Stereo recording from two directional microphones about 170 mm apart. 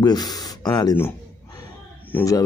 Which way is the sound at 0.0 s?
25° left (ahead or behind).